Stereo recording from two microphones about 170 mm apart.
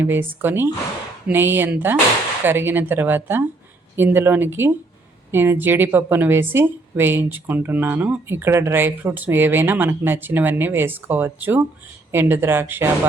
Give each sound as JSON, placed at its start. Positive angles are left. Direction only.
{"t": 0.0, "sound": "a woman's voice", "side_deg": -15}